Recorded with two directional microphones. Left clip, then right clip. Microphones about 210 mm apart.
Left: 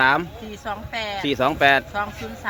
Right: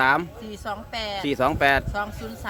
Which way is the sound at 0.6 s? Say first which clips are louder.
Left 2 dB; 45° right (ahead or behind).